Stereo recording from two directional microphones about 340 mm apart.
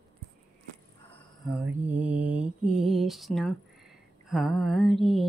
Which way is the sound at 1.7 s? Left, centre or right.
Centre.